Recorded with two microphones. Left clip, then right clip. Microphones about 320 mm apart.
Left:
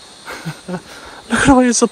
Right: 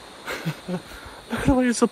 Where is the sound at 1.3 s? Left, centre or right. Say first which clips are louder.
Left 11 dB; left.